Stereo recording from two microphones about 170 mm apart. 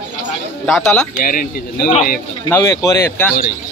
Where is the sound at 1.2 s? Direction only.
60° left (ahead or behind).